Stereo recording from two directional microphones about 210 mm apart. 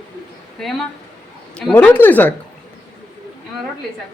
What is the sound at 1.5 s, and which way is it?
Speech, 5° left (ahead or behind).